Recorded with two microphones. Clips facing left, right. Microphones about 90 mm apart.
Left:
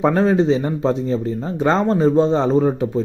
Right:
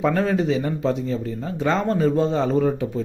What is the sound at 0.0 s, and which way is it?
Speech, 25° left (ahead or behind).